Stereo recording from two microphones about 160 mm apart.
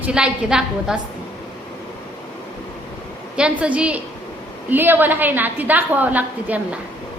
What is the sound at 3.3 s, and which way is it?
A woman's voice, 5° right (ahead or behind).